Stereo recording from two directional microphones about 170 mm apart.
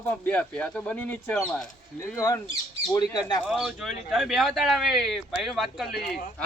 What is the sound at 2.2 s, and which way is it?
Speech, 20° left (ahead or behind).